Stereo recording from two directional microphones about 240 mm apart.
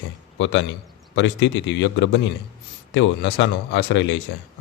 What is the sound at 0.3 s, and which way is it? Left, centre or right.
A man's voice, left.